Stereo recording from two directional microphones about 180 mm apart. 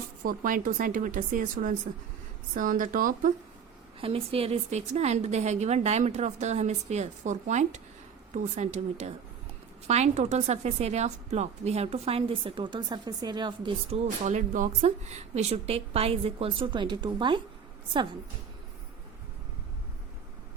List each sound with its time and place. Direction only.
0.2 s speech: 50° right (ahead or behind)
4.0 s a woman's voice: 30° right (ahead or behind)
14.3 s a woman's voice: 45° right (ahead or behind); by 17.4 s 25° right (ahead or behind)